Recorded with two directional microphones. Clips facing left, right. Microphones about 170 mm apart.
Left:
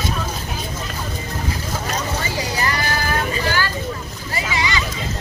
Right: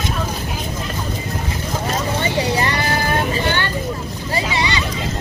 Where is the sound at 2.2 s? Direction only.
25° right (ahead or behind).